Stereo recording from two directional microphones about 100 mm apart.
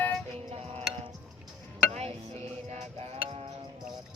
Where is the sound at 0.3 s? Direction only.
90° right.